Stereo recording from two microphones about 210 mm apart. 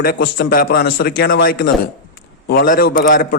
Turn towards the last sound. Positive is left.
turn(degrees=40)  # may be behind; listen again after turning